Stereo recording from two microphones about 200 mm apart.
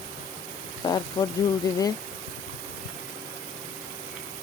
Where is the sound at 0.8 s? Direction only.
20° left (ahead or behind).